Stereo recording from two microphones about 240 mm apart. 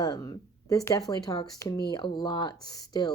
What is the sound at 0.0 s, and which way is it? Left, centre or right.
Speech, centre.